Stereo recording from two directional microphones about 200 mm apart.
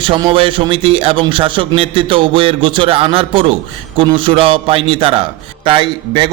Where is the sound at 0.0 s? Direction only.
25° right (ahead or behind).